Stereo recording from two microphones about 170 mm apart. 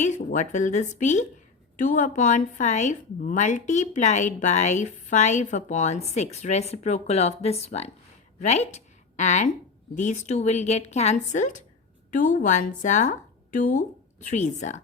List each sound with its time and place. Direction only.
0.0 s a woman's voice: 45° left (ahead or behind)